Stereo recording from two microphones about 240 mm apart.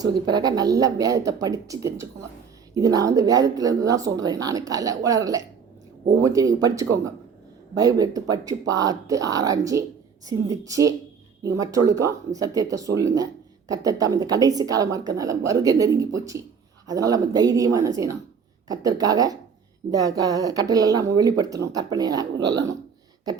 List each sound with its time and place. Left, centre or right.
0.0 s speech: centre